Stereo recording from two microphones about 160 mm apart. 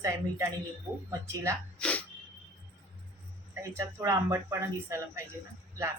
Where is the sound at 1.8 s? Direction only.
5° left (ahead or behind).